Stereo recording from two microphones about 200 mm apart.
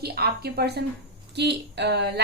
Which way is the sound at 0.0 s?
50° right (ahead or behind).